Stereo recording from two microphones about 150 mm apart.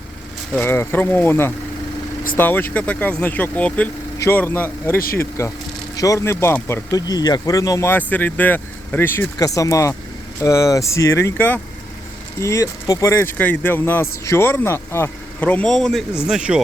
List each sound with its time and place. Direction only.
0.6 s speech: 15° left (ahead or behind); by 16.6 s 5° right (ahead or behind)